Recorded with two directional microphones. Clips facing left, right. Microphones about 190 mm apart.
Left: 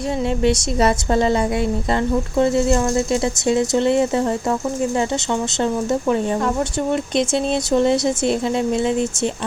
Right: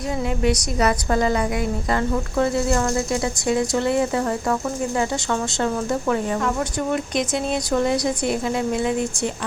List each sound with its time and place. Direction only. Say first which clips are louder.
0.4 s speech: left 3 dB; 30° left (ahead or behind)